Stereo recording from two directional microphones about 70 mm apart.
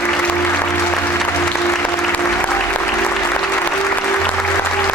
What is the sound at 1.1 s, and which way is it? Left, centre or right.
Music, left.